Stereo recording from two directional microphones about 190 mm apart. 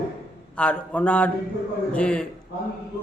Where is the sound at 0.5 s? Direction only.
5° left (ahead or behind).